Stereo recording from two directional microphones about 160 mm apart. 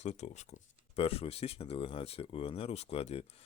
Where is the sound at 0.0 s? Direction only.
45° left (ahead or behind).